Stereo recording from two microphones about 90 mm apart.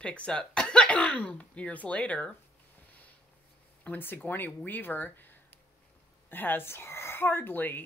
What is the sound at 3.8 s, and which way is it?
A woman's voice, 20° left (ahead or behind).